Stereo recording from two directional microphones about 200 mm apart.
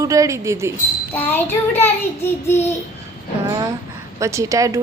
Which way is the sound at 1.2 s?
10° left (ahead or behind).